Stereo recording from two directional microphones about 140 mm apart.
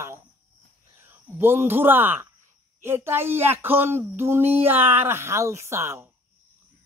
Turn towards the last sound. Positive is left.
turn(degrees=-20)  # may be behind; listen again after turning